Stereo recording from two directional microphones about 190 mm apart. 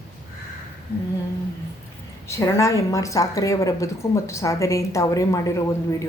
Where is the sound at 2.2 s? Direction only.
15° left (ahead or behind).